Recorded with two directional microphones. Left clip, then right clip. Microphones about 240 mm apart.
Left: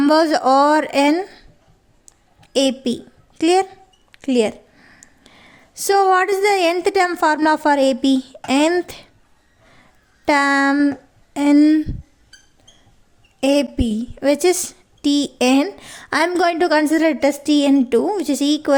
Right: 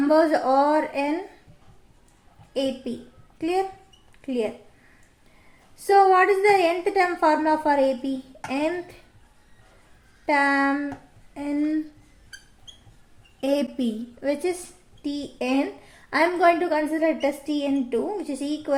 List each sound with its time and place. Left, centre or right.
0.1 s a woman's voice: left
2.5 s a woman's voice: left
5.9 s a woman's voice: left
10.2 s a woman's voice: left
13.4 s a woman's voice: left